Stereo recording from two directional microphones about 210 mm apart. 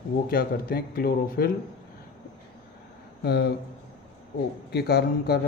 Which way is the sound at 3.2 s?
50° left (ahead or behind).